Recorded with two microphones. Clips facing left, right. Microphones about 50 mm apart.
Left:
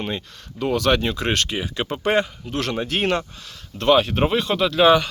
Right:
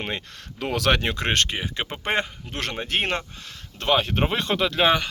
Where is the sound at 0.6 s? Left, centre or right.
Right.